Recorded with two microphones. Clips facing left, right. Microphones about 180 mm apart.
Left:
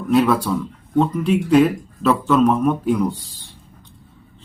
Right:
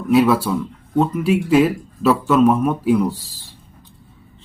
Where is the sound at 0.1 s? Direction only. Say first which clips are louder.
Right 2 dB; 5° right (ahead or behind).